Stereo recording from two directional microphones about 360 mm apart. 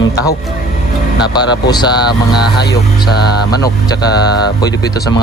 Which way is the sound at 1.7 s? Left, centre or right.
Centre.